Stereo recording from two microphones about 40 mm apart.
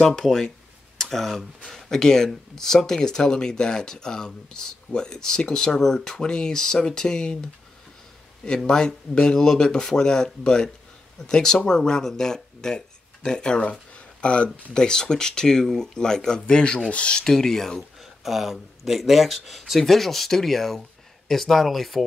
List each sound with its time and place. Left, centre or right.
0.0 s speech: centre
8.6 s speech: centre
17.2 s speech: centre
18.0 s speech: centre